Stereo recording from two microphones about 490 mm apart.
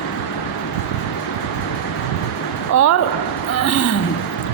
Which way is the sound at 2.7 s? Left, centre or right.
Left.